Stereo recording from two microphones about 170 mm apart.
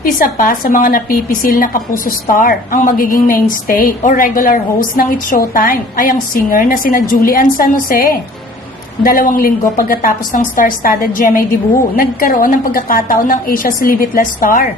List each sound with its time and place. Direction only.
0.0 s a woman's voice: 55° left (ahead or behind)